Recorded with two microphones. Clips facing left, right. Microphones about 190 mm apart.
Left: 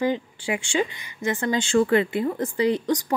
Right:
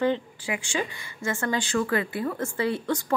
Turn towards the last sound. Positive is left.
turn(degrees=15)  # may be behind; listen again after turning